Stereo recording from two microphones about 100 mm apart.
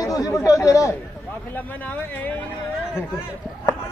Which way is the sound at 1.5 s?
20° left (ahead or behind).